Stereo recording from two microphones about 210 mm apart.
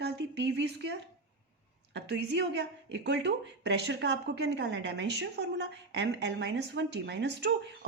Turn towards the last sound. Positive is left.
turn(degrees=-55)  # may be behind; listen again after turning